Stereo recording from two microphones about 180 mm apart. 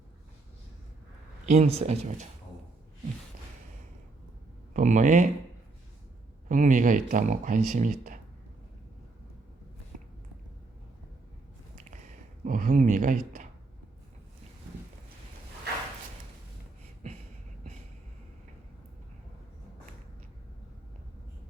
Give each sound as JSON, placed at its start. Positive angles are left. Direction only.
{"t": 1.5, "sound": "speech", "side_deg": -35}
{"t": 4.7, "sound": "speech", "side_deg": -45}
{"t": 6.5, "sound": "speech", "side_deg": -45}
{"t": 12.5, "sound": "speech", "side_deg": -45}